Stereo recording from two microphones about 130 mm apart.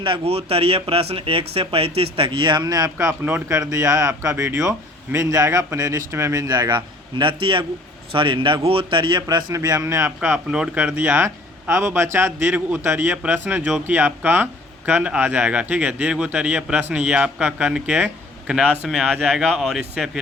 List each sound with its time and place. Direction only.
0.0 s a man's voice: 45° right (ahead or behind); by 10.1 s 25° right (ahead or behind)
10.2 s speech: 10° right (ahead or behind)